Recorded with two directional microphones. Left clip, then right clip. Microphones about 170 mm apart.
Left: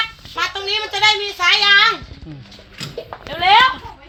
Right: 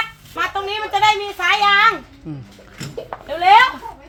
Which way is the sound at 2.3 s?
20° right (ahead or behind).